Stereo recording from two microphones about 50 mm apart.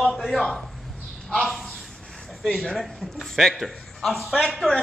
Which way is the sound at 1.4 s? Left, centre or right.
Centre.